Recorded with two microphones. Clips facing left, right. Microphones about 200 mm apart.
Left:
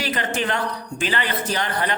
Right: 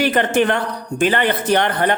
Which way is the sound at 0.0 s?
55° right (ahead or behind).